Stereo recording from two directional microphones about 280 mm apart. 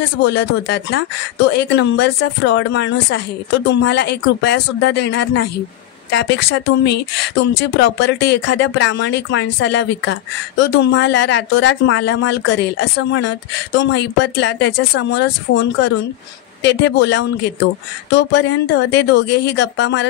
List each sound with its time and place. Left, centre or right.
0.2 s speech: left